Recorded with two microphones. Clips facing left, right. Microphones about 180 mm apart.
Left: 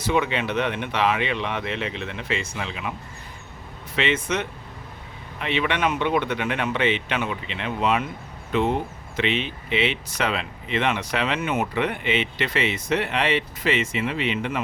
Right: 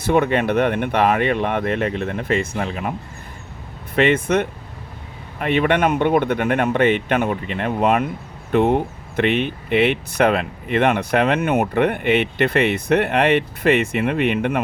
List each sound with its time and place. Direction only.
0.0 s speech: 50° right (ahead or behind)
3.9 s speech: 55° right (ahead or behind)